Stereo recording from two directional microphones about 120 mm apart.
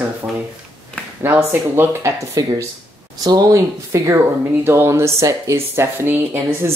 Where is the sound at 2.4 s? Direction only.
30° right (ahead or behind).